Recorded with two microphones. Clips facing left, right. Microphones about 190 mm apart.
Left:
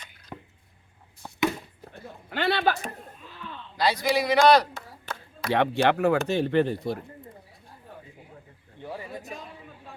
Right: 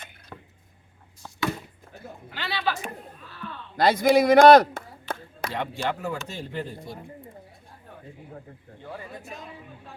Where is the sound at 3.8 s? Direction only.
50° right (ahead or behind).